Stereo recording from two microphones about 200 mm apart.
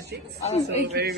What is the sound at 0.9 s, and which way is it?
Speech, 55° right (ahead or behind).